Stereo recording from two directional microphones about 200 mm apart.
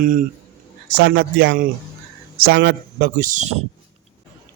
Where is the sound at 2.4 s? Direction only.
55° right (ahead or behind); by 3.6 s 40° right (ahead or behind).